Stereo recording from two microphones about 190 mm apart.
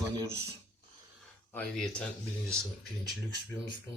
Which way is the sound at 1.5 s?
5° left (ahead or behind).